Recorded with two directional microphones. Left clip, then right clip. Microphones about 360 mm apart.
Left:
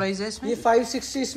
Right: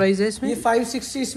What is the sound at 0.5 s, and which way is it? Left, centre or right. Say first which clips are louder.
Speech: left 2 dB; centre.